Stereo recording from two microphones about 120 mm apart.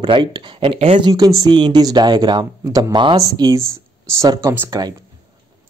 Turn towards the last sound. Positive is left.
turn(degrees=-30)  # may be behind; listen again after turning